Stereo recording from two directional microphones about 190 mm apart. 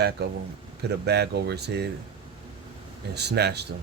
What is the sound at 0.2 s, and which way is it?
Speech, 55° right (ahead or behind).